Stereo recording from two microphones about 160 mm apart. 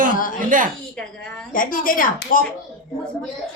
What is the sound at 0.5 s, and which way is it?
Speech, 55° right (ahead or behind).